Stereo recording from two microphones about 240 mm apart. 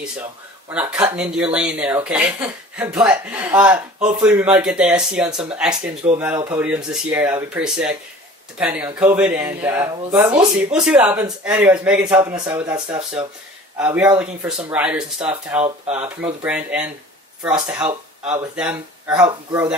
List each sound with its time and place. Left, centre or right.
0.7 s speech: centre